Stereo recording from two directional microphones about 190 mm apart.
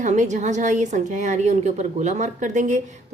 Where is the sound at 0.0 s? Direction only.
40° right (ahead or behind).